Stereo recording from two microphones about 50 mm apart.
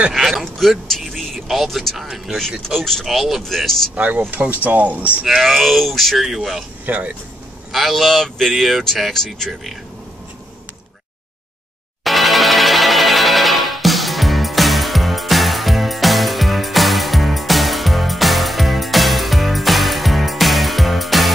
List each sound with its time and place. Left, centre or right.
0.1 s speech: centre
2.0 s speech: centre
2.8 s speech: centre
3.1 s speech: centre
3.4 s speech: centre
3.9 s speech: right
5.2 s speech: centre
6.9 s speech: right
7.7 s speech: centre
12.0 s music: centre